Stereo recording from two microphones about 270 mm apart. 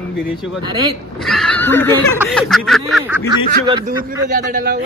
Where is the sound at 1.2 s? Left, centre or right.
Centre.